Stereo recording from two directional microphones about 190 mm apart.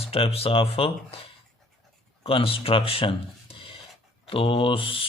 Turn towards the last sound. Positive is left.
turn(degrees=30)  # may be behind; listen again after turning